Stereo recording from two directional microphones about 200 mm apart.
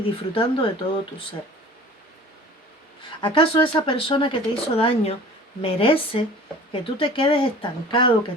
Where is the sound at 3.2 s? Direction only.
25° left (ahead or behind).